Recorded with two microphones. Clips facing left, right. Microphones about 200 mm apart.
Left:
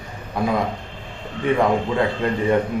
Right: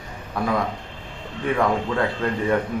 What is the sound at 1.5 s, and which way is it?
A man's voice, 20° left (ahead or behind).